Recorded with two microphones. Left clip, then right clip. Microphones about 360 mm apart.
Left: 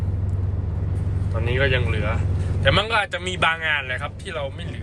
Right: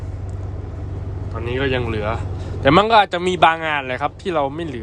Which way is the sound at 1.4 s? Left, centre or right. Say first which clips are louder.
Right 1 dB; centre.